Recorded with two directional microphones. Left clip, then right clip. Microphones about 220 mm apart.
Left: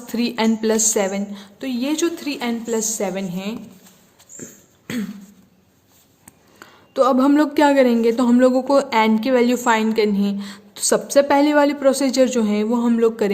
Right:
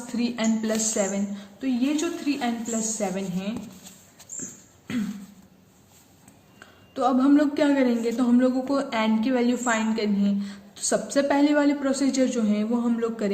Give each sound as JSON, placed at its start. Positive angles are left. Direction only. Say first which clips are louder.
{"t": 0.1, "sound": "a woman's voice", "louder": "left 6 dB", "side_deg": 50}
{"t": 6.6, "sound": "a woman's voice", "louder": "left 8 dB", "side_deg": 50}